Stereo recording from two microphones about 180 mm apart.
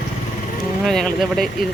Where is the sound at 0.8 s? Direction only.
Centre (ahead or behind).